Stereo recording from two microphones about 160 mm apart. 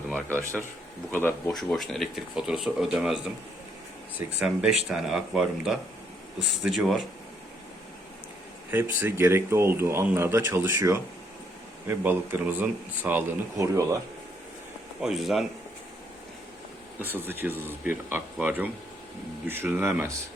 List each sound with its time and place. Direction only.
0.3 s speech: 15° right (ahead or behind)
1.1 s speech: 15° left (ahead or behind)
1.7 s speech: centre (ahead or behind)
4.4 s speech: 5° right (ahead or behind)
8.7 s speech: 10° right (ahead or behind)
15.0 s speech: centre (ahead or behind)
17.0 s speech: 15° right (ahead or behind)